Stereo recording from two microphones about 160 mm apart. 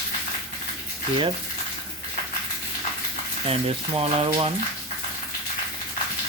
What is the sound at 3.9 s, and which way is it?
Speech, 35° right (ahead or behind).